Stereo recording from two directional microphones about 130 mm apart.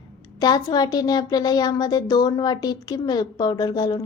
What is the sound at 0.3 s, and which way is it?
Speech, 30° left (ahead or behind).